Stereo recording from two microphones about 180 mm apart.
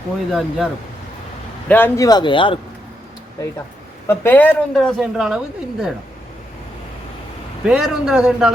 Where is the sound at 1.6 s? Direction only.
10° left (ahead or behind).